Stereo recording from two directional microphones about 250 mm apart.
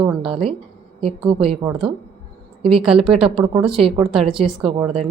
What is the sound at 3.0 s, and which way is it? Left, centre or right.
Speech, right.